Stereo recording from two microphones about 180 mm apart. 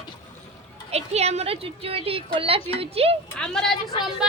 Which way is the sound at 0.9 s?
35° right (ahead or behind).